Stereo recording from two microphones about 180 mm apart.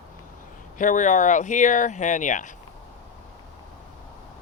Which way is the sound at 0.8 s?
45° left (ahead or behind).